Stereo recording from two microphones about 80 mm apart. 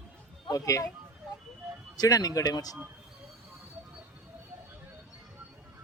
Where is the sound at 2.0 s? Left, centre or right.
Left.